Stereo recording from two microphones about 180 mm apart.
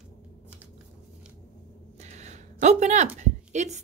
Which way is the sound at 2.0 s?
40° right (ahead or behind).